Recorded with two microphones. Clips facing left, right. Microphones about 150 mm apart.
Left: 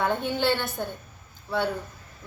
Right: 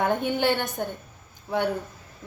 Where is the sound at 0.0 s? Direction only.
15° right (ahead or behind).